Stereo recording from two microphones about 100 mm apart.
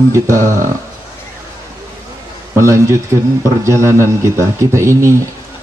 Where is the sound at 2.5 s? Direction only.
30° right (ahead or behind).